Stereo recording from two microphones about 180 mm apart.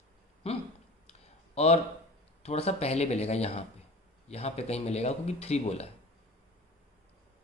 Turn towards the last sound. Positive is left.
turn(degrees=35)  # may be behind; listen again after turning